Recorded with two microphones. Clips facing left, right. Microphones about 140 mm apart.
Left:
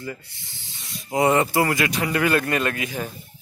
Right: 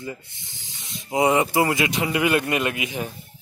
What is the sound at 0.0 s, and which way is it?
Music, 20° right (ahead or behind).